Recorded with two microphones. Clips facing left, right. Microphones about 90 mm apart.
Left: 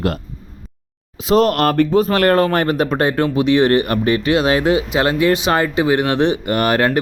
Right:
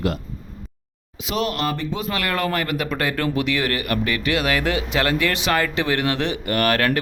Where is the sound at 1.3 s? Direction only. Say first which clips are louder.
Left 10 dB; 45° left (ahead or behind).